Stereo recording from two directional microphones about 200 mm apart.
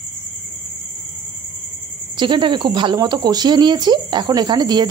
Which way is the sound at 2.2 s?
25° right (ahead or behind).